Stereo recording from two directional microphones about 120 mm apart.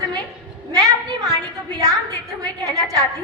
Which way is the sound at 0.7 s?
30° right (ahead or behind).